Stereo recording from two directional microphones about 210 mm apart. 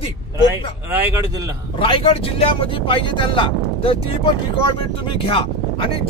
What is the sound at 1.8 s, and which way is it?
Speech, 25° left (ahead or behind).